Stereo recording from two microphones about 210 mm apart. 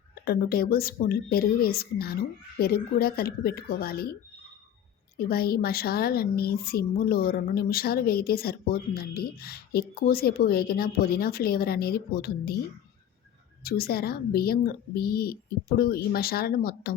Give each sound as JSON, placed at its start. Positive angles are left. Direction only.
{"t": 0.3, "sound": "a woman's voice", "side_deg": 45}
{"t": 13.7, "sound": "a woman's voice", "side_deg": 45}